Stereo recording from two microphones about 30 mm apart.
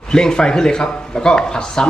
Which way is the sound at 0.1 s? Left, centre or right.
Left.